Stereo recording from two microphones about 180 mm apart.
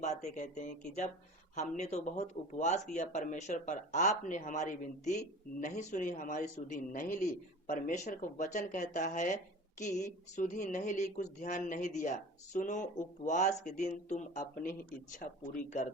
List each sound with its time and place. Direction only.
0.0 s speech: 45° left (ahead or behind)